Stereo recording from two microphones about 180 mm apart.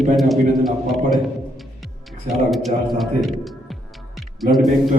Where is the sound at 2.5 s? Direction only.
Centre (ahead or behind).